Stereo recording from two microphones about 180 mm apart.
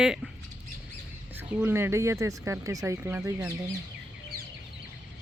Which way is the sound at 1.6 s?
10° right (ahead or behind).